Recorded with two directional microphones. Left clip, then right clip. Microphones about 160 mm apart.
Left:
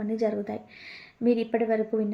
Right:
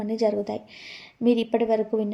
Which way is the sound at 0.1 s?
30° right (ahead or behind).